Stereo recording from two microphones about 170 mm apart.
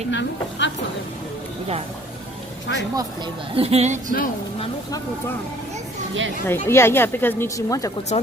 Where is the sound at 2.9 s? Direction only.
25° right (ahead or behind); by 4.1 s 45° right (ahead or behind).